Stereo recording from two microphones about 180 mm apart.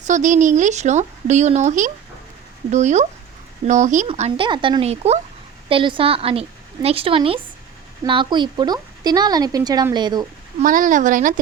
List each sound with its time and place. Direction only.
0.0 s speech: 45° right (ahead or behind)
4.1 s speech: 30° right (ahead or behind)
10.6 s speech: 50° right (ahead or behind)